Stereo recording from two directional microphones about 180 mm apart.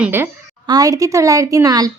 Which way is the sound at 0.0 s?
10° right (ahead or behind).